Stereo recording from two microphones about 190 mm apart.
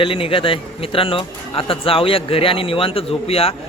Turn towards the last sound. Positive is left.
turn(degrees=30)  # may be behind; listen again after turning